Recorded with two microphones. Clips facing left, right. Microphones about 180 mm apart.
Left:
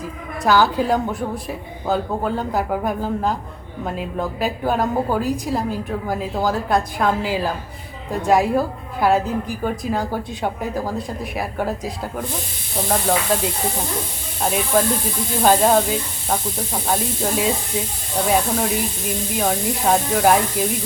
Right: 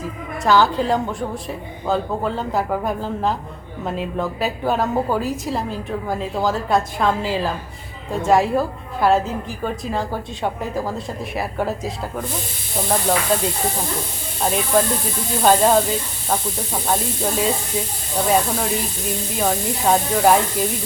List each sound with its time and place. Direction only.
0.4 s a woman's voice: centre (ahead or behind)
14.4 s a woman's voice: centre (ahead or behind)